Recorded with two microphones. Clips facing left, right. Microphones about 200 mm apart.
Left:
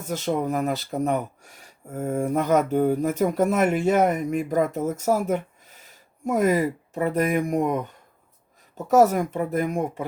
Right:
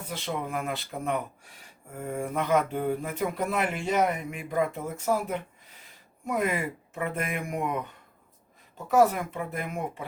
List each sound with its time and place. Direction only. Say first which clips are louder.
0.0 s speech: left 8 dB; 45° left (ahead or behind)
8.9 s speech: left 5 dB; 40° left (ahead or behind)